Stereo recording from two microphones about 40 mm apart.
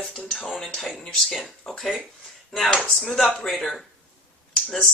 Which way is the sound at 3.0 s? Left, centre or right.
Centre.